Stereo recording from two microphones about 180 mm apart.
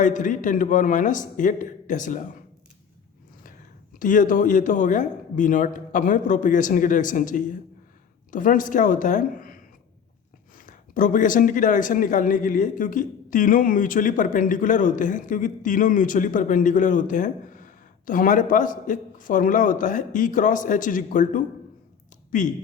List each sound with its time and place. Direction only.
0.0 s speech: 45° left (ahead or behind)
4.0 s speech: 45° left (ahead or behind)
10.7 s speech: 45° left (ahead or behind)